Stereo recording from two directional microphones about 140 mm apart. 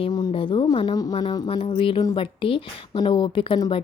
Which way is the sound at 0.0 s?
30° left (ahead or behind).